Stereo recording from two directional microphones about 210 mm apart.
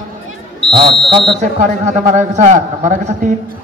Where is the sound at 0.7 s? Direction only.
25° right (ahead or behind).